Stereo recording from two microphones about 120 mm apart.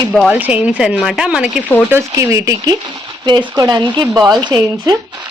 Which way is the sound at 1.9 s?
25° right (ahead or behind).